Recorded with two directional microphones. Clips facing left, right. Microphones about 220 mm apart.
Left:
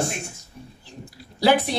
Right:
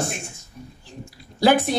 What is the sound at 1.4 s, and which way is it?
Speech, 45° right (ahead or behind).